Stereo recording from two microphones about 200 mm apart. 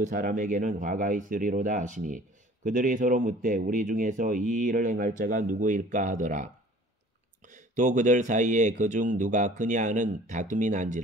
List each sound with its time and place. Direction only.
0.0 s speech: 40° right (ahead or behind)